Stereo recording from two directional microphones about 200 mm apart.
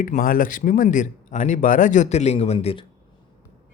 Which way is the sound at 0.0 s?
40° left (ahead or behind).